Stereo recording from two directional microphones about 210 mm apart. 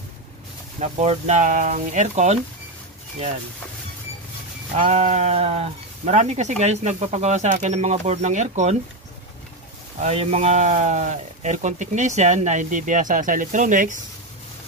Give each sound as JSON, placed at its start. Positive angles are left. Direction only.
{"t": 0.7, "sound": "speech", "side_deg": -30}
{"t": 4.7, "sound": "speech", "side_deg": -35}
{"t": 9.9, "sound": "speech", "side_deg": -30}